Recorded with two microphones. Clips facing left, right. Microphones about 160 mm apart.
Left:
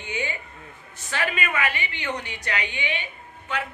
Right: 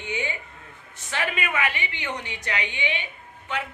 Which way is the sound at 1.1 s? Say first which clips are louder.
Left 1 dB; 20° right (ahead or behind).